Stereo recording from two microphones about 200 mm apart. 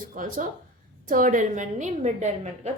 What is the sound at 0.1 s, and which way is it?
A woman's voice, 45° right (ahead or behind).